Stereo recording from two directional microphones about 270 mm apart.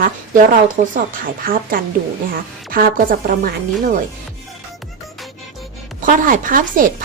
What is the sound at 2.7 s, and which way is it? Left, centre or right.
Speech, right.